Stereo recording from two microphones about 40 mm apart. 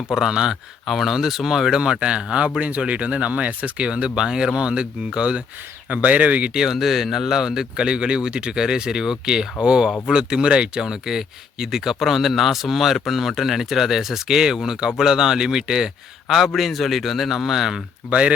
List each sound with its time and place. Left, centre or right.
0.2 s speech: centre
0.5 s speech: centre
1.8 s speech: right
5.9 s speech: right
6.7 s speech: centre
16.6 s speech: centre
18.1 s speech: right